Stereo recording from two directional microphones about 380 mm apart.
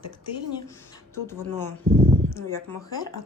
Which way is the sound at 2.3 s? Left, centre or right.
Centre.